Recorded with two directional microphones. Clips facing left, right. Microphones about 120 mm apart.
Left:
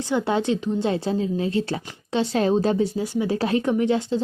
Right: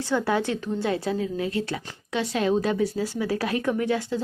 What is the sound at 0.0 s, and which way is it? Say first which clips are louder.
A woman's voice: left 2 dB; 20° left (ahead or behind).